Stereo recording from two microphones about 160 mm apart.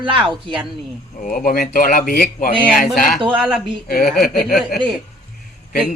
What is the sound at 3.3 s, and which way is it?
Speech, 5° right (ahead or behind).